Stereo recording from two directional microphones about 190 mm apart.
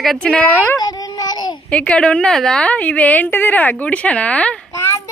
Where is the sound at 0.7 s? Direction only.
20° left (ahead or behind).